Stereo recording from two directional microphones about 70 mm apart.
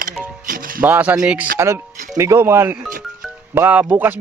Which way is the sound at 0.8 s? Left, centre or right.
Right.